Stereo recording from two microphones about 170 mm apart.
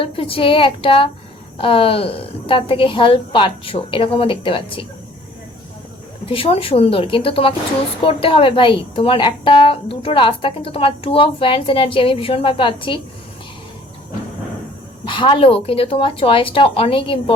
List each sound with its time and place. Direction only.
0.0 s a woman's voice: 30° left (ahead or behind)
6.2 s a woman's voice: 35° left (ahead or behind)
15.0 s a woman's voice: 30° left (ahead or behind)